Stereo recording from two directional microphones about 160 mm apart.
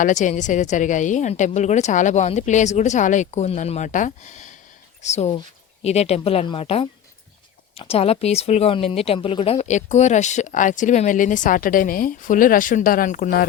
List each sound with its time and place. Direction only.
0.0 s speech: 50° left (ahead or behind)